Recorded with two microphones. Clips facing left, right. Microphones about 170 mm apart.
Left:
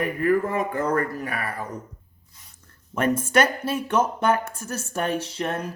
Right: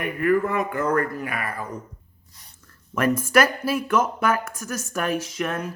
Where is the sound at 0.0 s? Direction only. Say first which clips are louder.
Even; 35° left (ahead or behind).